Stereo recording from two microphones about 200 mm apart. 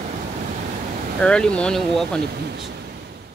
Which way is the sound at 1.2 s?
5° left (ahead or behind).